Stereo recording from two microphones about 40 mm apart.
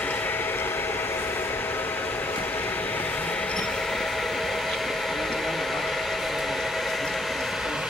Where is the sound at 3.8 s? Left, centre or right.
Centre.